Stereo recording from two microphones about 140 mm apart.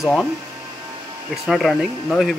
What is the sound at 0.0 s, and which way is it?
Speech, centre (ahead or behind).